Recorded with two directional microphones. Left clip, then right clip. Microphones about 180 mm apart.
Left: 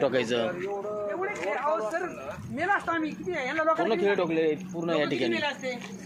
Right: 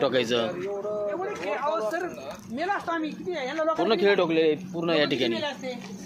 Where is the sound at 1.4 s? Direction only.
20° right (ahead or behind); by 5.3 s 5° right (ahead or behind).